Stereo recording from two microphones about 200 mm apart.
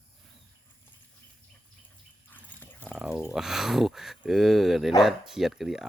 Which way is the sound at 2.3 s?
10° left (ahead or behind).